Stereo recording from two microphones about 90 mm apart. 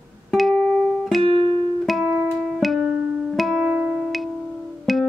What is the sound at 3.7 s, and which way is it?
Music, 15° right (ahead or behind).